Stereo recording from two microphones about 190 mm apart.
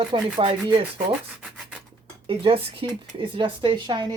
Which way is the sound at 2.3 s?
30° right (ahead or behind).